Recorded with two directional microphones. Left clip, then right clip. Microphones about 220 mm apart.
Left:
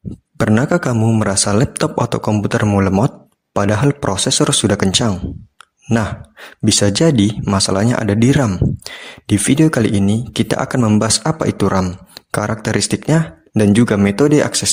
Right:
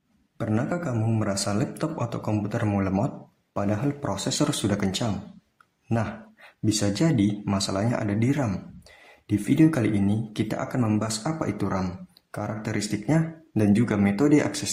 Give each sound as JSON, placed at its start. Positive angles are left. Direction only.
{"t": 0.3, "sound": "speech", "side_deg": 40}
{"t": 6.7, "sound": "speech", "side_deg": 40}